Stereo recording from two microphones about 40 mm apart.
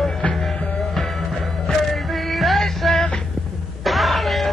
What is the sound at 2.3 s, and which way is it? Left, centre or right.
Music, centre.